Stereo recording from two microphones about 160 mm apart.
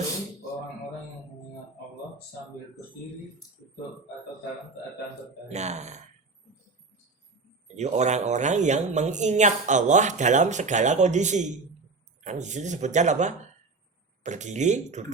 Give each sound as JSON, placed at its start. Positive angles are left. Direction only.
{"t": 5.5, "sound": "speech", "side_deg": -45}
{"t": 7.8, "sound": "speech", "side_deg": -45}